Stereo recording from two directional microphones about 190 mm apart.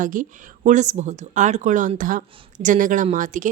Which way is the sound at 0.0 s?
45° right (ahead or behind).